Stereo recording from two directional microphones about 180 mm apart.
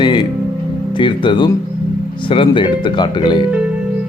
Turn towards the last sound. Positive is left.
turn(degrees=25)  # may be behind; listen again after turning